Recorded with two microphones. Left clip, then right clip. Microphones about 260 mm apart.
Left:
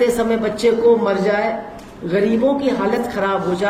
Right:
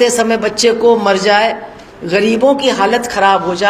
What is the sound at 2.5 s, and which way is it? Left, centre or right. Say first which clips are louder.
A woman's voice: right 6 dB; centre.